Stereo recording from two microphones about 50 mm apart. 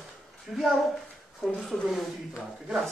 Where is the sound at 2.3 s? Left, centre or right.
Centre.